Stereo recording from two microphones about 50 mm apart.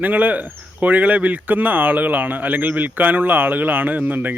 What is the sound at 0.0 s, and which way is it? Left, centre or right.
Speech, right.